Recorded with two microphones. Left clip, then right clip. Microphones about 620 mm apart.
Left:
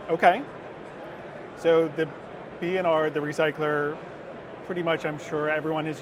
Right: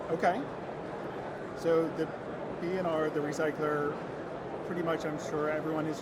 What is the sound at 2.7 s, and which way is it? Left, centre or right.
Speech, left.